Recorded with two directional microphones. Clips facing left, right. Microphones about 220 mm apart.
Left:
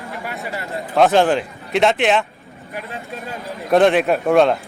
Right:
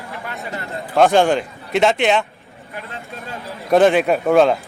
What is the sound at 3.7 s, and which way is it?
Speech, centre (ahead or behind).